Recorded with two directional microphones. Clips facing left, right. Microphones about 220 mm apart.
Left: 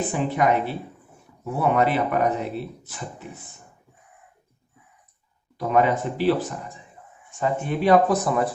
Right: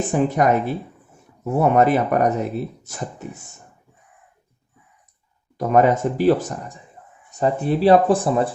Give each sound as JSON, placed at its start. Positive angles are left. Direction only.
{"t": 0.1, "sound": "speech", "side_deg": -45}
{"t": 5.5, "sound": "speech", "side_deg": -45}